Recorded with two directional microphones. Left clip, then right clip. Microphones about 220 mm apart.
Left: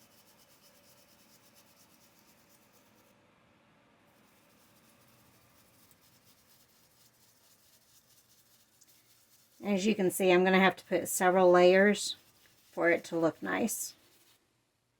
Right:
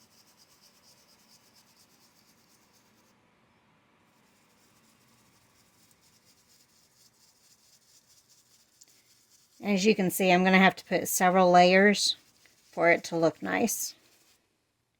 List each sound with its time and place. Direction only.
9.6 s a woman's voice: 50° right (ahead or behind)